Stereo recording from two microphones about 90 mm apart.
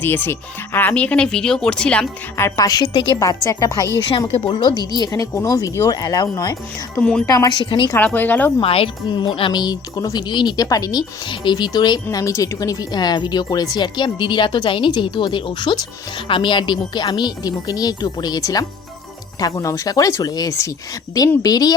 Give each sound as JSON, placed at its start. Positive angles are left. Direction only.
{"t": 0.0, "sound": "speech", "side_deg": 20}
{"t": 2.6, "sound": "speech", "side_deg": 50}
{"t": 2.9, "sound": "speech", "side_deg": 70}
{"t": 3.2, "sound": "speech", "side_deg": 40}
{"t": 4.4, "sound": "speech", "side_deg": 90}
{"t": 4.7, "sound": "speech", "side_deg": 50}
{"t": 7.0, "sound": "speech", "side_deg": 10}
{"t": 7.3, "sound": "speech", "side_deg": 45}
{"t": 7.9, "sound": "speech", "side_deg": 20}
{"t": 8.6, "sound": "speech", "side_deg": 90}
{"t": 9.9, "sound": "speech", "side_deg": 40}
{"t": 11.3, "sound": "speech", "side_deg": 60}
{"t": 12.1, "sound": "speech", "side_deg": 35}